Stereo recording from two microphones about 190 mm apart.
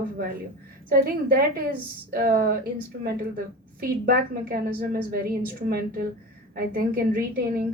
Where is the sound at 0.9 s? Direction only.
50° right (ahead or behind).